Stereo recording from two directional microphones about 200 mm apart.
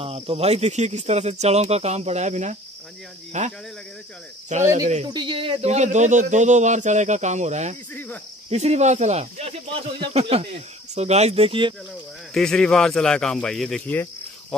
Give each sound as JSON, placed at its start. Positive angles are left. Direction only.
{"t": 0.0, "sound": "speech", "side_deg": -30}
{"t": 4.5, "sound": "speech", "side_deg": -35}
{"t": 5.0, "sound": "speech", "side_deg": -25}
{"t": 7.9, "sound": "cricket", "side_deg": 10}
{"t": 8.5, "sound": "speech", "side_deg": -35}
{"t": 12.4, "sound": "speech", "side_deg": 0}